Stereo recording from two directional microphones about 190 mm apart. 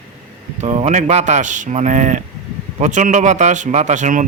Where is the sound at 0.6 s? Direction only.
35° right (ahead or behind).